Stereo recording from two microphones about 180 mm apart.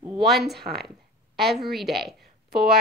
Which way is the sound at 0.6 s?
60° right (ahead or behind).